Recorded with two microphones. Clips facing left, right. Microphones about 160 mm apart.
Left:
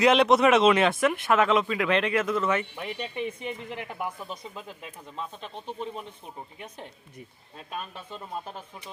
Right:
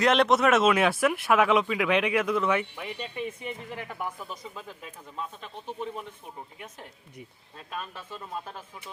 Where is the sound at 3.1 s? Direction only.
20° left (ahead or behind).